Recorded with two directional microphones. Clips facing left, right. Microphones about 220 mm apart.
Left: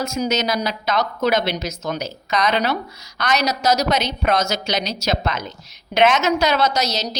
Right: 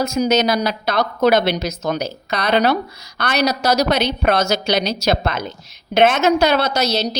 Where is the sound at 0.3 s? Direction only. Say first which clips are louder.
Right 5 dB; 60° right (ahead or behind).